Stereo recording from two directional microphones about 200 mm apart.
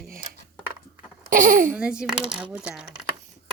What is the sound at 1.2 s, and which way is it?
Speech, 40° right (ahead or behind).